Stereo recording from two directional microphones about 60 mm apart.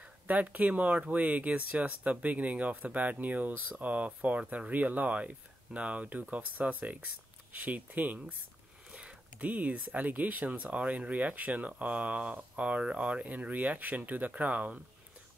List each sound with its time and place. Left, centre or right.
0.0 s speech: right
9.4 s speech: right